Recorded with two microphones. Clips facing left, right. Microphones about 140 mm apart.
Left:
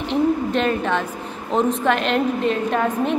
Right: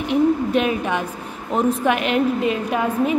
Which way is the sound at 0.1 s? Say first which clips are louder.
Right 2 dB; 10° right (ahead or behind).